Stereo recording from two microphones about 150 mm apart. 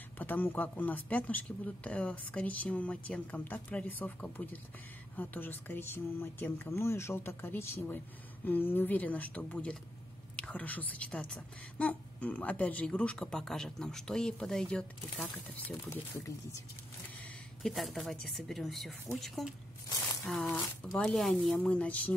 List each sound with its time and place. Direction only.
0.2 s speech: 10° left (ahead or behind)
15.9 s speech: 20° left (ahead or behind)
17.6 s speech: centre (ahead or behind)